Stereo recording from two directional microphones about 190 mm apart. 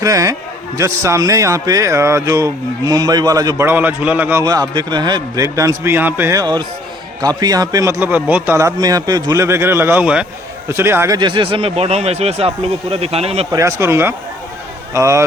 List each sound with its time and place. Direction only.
0.0 s speech: 15° right (ahead or behind)
13.5 s speech: 15° right (ahead or behind)